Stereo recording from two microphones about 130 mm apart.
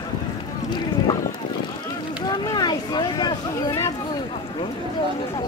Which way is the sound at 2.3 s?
35° left (ahead or behind).